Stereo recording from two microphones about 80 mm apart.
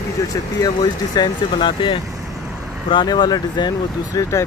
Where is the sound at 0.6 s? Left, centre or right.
Left.